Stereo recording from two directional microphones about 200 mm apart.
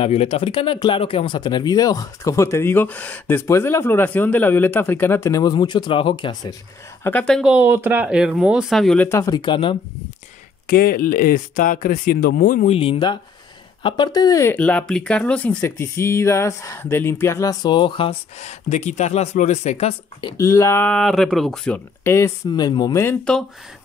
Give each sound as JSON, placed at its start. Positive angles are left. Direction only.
{"t": 0.0, "sound": "speech", "side_deg": 30}
{"t": 7.0, "sound": "speech", "side_deg": 10}
{"t": 10.7, "sound": "speech", "side_deg": 45}
{"t": 12.7, "sound": "speech", "side_deg": 30}